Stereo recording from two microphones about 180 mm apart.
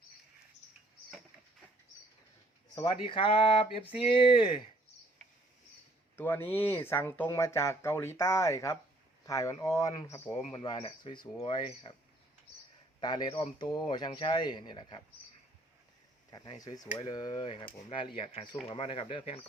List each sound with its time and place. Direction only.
2.7 s speech: 25° left (ahead or behind)
6.1 s speech: 10° left (ahead or behind); by 11.9 s 25° left (ahead or behind)
13.0 s speech: 25° left (ahead or behind)
16.3 s speech: 20° left (ahead or behind)